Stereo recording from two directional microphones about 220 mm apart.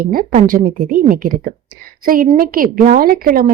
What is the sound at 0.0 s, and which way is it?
A woman's voice, 40° right (ahead or behind).